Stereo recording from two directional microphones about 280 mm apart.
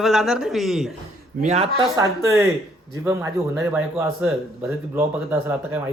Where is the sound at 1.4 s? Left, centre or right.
Right.